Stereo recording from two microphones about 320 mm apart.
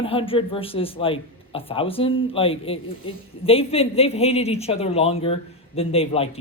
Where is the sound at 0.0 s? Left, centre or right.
Centre.